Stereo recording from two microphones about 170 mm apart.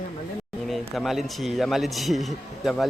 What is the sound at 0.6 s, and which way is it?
A man's voice, 5° left (ahead or behind).